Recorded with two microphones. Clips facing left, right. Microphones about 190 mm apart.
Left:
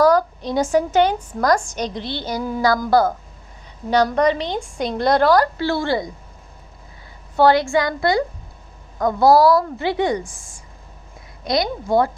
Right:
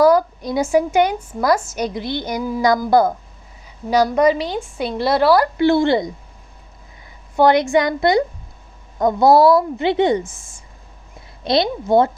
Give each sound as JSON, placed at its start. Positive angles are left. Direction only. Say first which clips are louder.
{"t": 0.0, "sound": "a woman's voice", "louder": "right 2 dB", "side_deg": -10}
{"t": 5.5, "sound": "speech", "louder": "right 6 dB", "side_deg": -20}
{"t": 7.3, "sound": "speech", "louder": "right 1 dB", "side_deg": -20}